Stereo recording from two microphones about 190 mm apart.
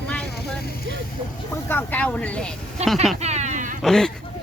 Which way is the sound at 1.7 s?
10° left (ahead or behind).